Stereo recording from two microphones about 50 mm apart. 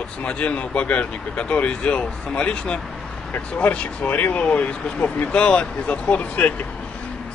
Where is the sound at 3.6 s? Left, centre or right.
Left.